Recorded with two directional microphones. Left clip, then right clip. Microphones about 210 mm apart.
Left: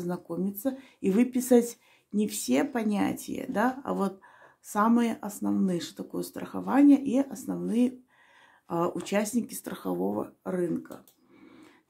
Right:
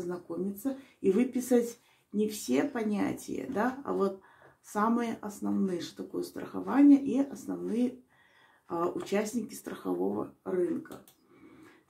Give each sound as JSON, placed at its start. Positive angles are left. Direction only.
{"t": 0.0, "sound": "speech", "side_deg": 40}